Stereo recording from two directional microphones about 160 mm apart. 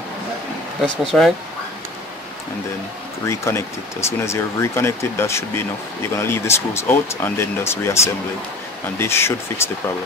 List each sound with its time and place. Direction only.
0.8 s speech: 5° left (ahead or behind)
3.3 s speech: 15° left (ahead or behind)